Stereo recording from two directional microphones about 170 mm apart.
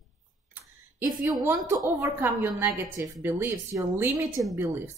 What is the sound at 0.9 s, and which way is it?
A woman's voice, 20° right (ahead or behind).